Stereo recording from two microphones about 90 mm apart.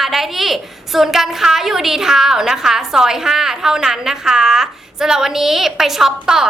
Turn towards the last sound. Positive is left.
turn(degrees=-5)  # may be behind; listen again after turning